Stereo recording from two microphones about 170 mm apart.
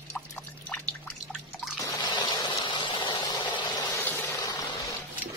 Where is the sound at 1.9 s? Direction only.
25° left (ahead or behind).